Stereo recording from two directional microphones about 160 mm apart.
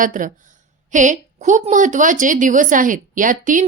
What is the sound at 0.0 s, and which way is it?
A woman's voice, 55° right (ahead or behind).